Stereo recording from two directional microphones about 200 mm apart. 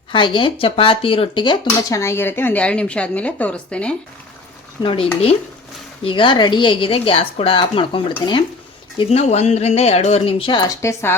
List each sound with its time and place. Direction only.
0.1 s speech: 25° left (ahead or behind); by 3.9 s 5° left (ahead or behind)
4.8 s speech: 25° left (ahead or behind)